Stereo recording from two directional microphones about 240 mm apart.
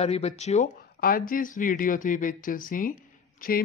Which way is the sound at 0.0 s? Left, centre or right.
Left.